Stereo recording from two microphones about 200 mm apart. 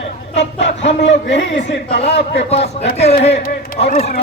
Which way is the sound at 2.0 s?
30° left (ahead or behind).